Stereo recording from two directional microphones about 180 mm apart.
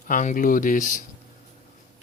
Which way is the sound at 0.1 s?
45° left (ahead or behind).